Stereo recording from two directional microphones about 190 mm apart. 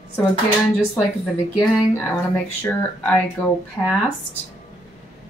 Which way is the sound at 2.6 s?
5° left (ahead or behind).